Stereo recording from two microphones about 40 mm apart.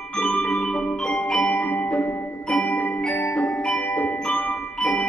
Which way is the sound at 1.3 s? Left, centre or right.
Left.